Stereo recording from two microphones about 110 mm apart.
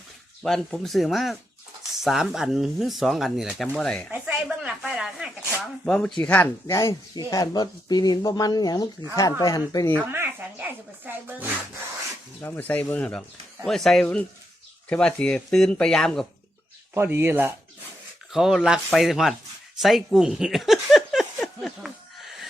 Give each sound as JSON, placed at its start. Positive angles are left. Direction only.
{"t": 0.4, "sound": "speech", "side_deg": 5}
{"t": 3.7, "sound": "speech", "side_deg": 10}
{"t": 4.1, "sound": "a sound", "side_deg": -10}
{"t": 5.8, "sound": "speech", "side_deg": 5}
{"t": 6.7, "sound": "speech", "side_deg": 30}
{"t": 10.1, "sound": "speech", "side_deg": -20}
{"t": 12.4, "sound": "speech", "side_deg": 20}
{"t": 16.9, "sound": "speech", "side_deg": -25}
{"t": 18.3, "sound": "speech", "side_deg": -5}
{"t": 19.8, "sound": "a sound", "side_deg": 0}